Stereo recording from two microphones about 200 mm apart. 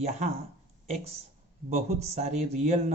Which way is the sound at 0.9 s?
35° right (ahead or behind).